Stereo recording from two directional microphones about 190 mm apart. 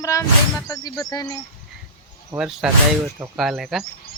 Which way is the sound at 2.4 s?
5° right (ahead or behind).